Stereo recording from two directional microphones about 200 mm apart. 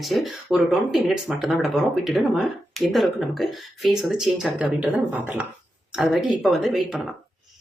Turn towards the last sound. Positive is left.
turn(degrees=0)  # may be behind; listen again after turning